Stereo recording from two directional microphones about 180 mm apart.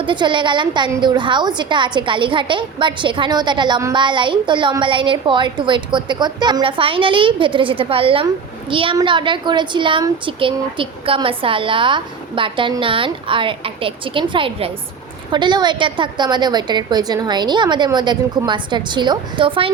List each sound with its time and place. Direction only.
0.0 s a woman's voice: 25° right (ahead or behind)